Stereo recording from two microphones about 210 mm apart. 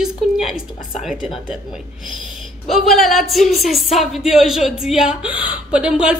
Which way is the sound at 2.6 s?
Centre (ahead or behind).